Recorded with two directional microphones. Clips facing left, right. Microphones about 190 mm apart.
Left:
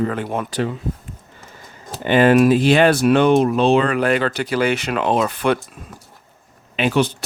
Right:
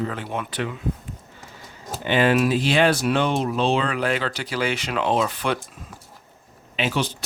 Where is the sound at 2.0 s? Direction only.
50° left (ahead or behind).